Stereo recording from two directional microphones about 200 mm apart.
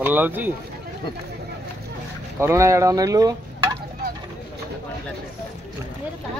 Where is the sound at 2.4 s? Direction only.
15° right (ahead or behind).